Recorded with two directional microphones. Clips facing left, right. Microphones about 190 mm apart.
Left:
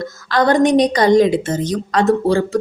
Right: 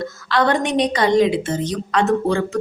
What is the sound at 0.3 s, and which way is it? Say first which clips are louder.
Speech: left 5 dB; 40° left (ahead or behind).